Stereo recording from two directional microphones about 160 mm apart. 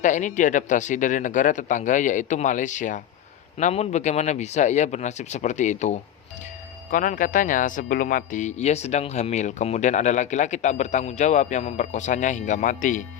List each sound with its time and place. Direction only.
0.0 s speech: 50° left (ahead or behind)